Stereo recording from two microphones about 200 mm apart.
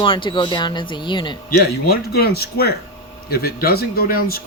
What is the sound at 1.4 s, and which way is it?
Speech, 50° left (ahead or behind).